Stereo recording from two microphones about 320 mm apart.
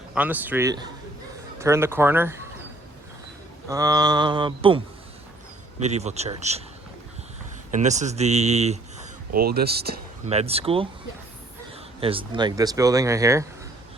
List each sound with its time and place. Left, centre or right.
0.1 s a man's voice: centre
3.7 s speech: centre
5.8 s speech: right
7.7 s speech: right
11.9 s speech: centre